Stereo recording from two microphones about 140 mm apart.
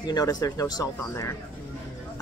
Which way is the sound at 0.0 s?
25° left (ahead or behind).